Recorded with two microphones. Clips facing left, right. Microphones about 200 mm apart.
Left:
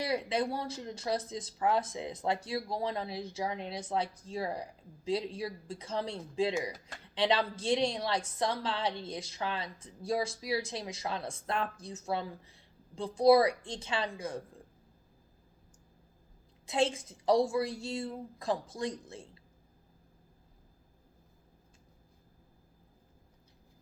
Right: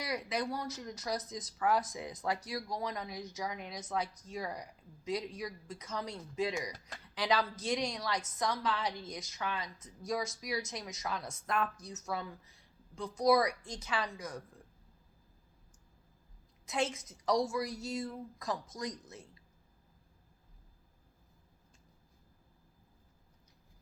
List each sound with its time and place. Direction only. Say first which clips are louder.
0.0 s a woman's voice: left 5 dB; 30° left (ahead or behind)
16.6 s a woman's voice: left 5 dB; 30° left (ahead or behind)